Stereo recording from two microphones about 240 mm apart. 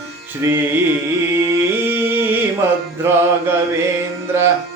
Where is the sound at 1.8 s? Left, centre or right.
Centre.